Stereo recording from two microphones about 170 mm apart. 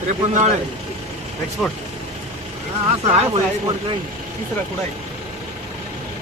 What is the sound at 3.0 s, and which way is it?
Speech, 35° right (ahead or behind).